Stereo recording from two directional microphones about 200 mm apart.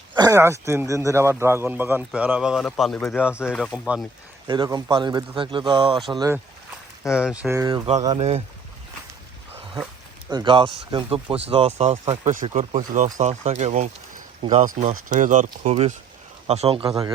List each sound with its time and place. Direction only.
0.2 s a man's voice: 15° right (ahead or behind)
4.4 s a man's voice: 20° right (ahead or behind)
7.1 s speech: 5° right (ahead or behind)
7.5 s a man's voice: 15° right (ahead or behind)
8.2 s speech: 35° right (ahead or behind)
10.2 s a man's voice: 20° right (ahead or behind)